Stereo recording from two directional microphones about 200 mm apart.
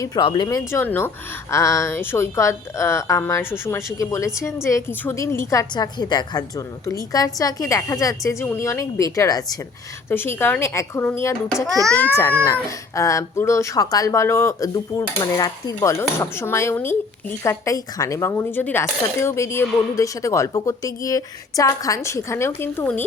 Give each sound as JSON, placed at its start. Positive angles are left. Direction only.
{"t": 0.0, "sound": "speech", "side_deg": 20}